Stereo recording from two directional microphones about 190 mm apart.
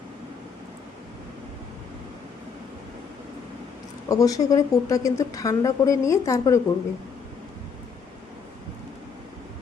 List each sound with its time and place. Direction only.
4.1 s speech: 20° left (ahead or behind)